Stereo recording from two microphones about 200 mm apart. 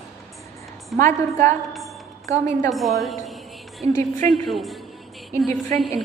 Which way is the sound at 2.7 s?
Centre (ahead or behind).